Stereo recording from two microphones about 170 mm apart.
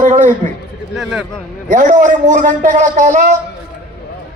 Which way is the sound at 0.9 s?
Centre (ahead or behind).